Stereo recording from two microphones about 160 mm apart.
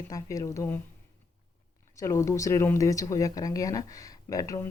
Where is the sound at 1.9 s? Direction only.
20° left (ahead or behind).